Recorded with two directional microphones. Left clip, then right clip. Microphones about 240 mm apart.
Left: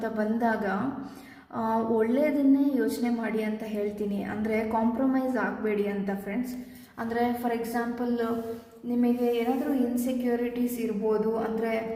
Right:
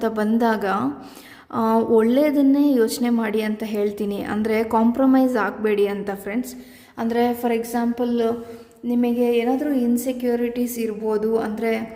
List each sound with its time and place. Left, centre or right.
0.0 s a woman's voice: right